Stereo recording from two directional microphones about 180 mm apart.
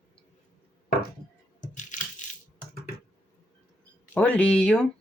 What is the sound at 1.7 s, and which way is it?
Coin, 45° left (ahead or behind).